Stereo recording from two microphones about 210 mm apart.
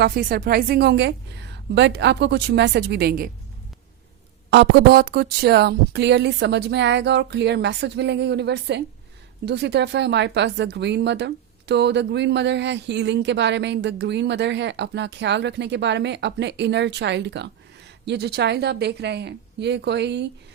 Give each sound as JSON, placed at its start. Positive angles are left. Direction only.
{"t": 0.0, "sound": "a woman's voice", "side_deg": -45}
{"t": 4.5, "sound": "a woman's voice", "side_deg": -50}